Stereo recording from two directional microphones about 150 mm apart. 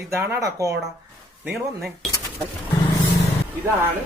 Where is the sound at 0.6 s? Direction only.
20° right (ahead or behind).